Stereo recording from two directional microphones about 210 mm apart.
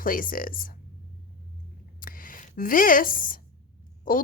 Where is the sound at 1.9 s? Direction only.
40° left (ahead or behind).